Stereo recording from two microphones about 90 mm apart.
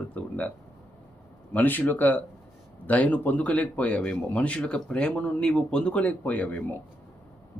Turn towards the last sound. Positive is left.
turn(degrees=15)  # may be behind; listen again after turning